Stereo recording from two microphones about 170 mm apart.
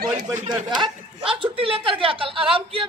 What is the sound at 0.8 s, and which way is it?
A woman's voice, 30° right (ahead or behind).